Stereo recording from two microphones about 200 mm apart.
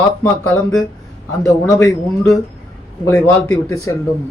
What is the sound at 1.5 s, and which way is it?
Speech, 15° left (ahead or behind).